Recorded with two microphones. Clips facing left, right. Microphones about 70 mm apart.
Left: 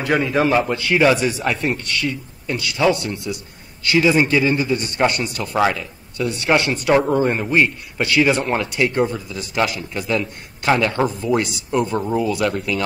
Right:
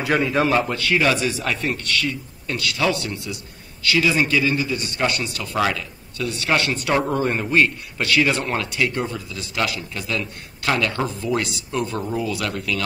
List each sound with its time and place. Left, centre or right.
0.0 s speech: centre
3.8 s a man's voice: left
11.1 s a man's voice: centre